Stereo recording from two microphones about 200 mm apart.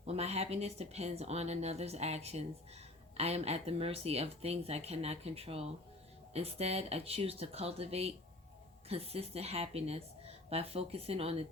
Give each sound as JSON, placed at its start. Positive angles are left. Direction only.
{"t": 0.0, "sound": "a woman's voice", "side_deg": -30}